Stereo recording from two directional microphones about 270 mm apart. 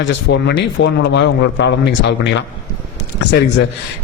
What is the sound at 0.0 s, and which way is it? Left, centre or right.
A man's voice, left.